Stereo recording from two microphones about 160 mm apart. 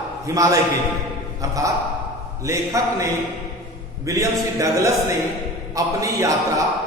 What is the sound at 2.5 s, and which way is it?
A man's voice, 20° right (ahead or behind).